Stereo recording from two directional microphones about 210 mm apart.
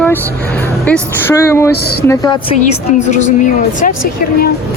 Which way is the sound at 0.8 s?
10° left (ahead or behind).